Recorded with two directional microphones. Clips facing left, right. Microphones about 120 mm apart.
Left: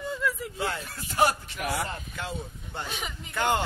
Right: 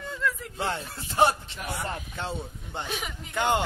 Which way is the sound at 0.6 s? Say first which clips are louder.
Right 1 dB; 30° right (ahead or behind).